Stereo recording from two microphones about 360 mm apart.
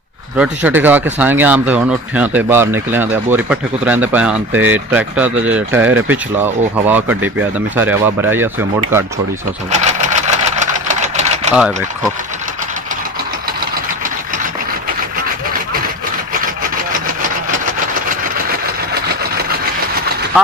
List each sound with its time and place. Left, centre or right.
0.4 s speech: centre
9.7 s sewing machine: centre
11.5 s speech: centre